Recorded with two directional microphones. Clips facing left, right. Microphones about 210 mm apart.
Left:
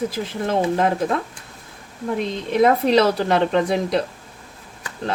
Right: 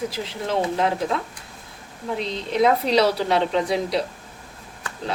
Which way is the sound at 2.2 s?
50° left (ahead or behind).